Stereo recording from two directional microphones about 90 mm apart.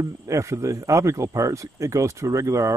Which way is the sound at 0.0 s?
35° right (ahead or behind).